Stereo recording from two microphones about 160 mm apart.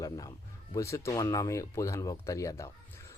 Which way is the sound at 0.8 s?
20° left (ahead or behind).